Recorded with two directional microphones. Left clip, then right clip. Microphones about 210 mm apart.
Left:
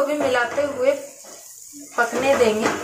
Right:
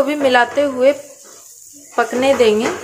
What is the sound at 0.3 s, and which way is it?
Speech, 50° right (ahead or behind).